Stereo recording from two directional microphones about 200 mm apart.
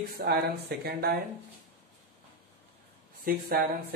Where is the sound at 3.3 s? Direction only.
45° right (ahead or behind).